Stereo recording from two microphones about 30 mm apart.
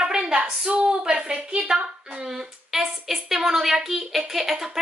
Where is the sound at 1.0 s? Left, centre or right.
Right.